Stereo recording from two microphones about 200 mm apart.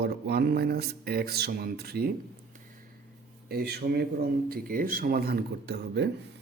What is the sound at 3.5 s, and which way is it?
Speech, 55° right (ahead or behind).